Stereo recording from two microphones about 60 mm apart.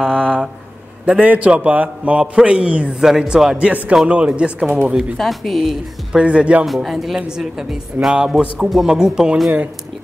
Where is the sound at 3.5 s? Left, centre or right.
Centre.